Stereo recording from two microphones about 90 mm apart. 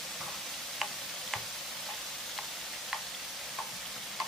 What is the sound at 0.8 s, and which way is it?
Frying, centre (ahead or behind).